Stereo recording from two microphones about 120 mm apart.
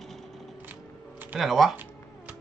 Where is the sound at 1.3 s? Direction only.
Centre (ahead or behind).